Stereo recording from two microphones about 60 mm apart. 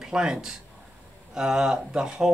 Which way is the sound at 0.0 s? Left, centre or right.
Centre.